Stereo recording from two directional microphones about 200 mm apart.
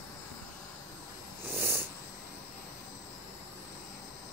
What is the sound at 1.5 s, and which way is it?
Cat, 10° right (ahead or behind).